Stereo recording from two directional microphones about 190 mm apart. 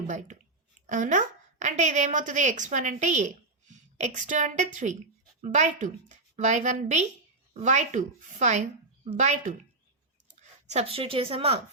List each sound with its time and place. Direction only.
0.1 s a woman's voice: 40° right (ahead or behind)